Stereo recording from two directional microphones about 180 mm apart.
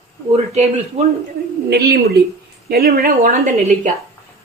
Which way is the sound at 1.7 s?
60° right (ahead or behind).